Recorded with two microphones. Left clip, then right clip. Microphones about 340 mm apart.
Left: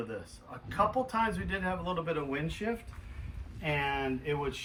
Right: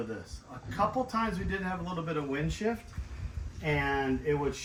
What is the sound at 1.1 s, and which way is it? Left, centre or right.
A man's voice, centre.